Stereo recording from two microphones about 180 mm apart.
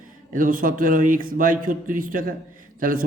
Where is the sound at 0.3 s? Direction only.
50° right (ahead or behind).